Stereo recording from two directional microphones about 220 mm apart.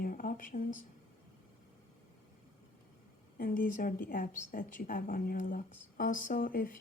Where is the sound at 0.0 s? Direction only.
40° left (ahead or behind).